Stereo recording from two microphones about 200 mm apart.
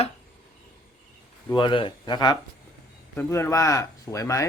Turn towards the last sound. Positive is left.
turn(degrees=15)  # may be behind; listen again after turning